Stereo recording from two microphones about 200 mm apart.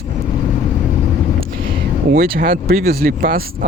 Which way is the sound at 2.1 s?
45° right (ahead or behind).